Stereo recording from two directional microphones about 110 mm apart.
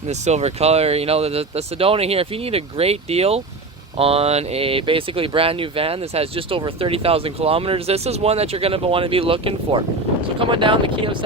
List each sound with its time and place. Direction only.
0.1 s speech: 85° right; by 11.2 s 50° right (ahead or behind)